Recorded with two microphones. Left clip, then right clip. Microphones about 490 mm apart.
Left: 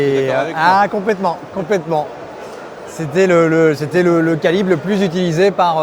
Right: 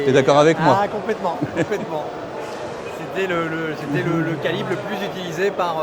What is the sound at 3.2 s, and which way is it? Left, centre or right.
A man's voice, left.